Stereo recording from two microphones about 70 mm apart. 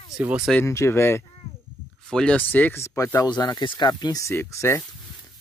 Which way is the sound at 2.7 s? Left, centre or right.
Left.